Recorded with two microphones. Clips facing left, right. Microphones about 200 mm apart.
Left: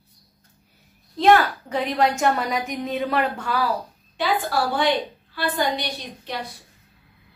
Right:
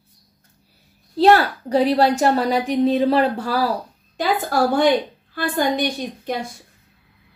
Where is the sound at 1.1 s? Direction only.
35° right (ahead or behind).